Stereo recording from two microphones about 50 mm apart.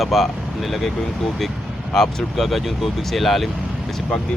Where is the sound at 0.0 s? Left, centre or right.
Centre.